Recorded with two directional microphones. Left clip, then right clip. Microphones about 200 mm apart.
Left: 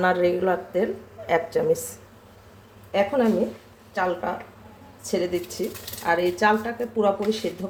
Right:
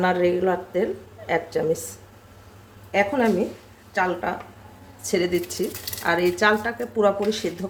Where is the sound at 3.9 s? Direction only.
20° right (ahead or behind).